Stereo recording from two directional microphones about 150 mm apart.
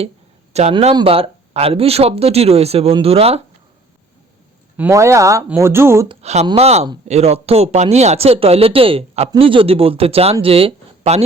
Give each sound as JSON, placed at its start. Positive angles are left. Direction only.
{"t": 0.7, "sound": "speech", "side_deg": -40}
{"t": 4.8, "sound": "speech", "side_deg": -20}
{"t": 6.2, "sound": "speech", "side_deg": -50}